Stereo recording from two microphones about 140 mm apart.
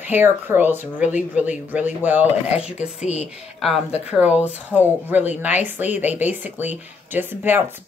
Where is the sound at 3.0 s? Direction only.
55° left (ahead or behind).